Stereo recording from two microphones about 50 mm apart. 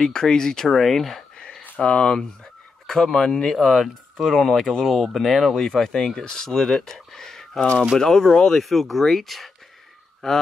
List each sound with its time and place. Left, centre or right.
0.0 s speech: centre
1.8 s speech: centre